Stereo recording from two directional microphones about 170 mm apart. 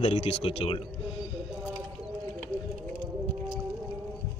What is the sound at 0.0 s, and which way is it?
Speech, 40° left (ahead or behind).